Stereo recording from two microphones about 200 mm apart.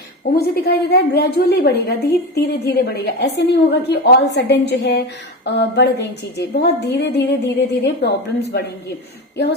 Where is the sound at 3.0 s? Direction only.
55° left (ahead or behind).